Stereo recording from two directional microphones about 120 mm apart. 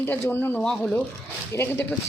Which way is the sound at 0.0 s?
20° left (ahead or behind).